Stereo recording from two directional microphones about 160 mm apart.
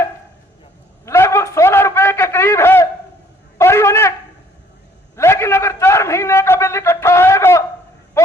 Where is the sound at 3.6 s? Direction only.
15° left (ahead or behind).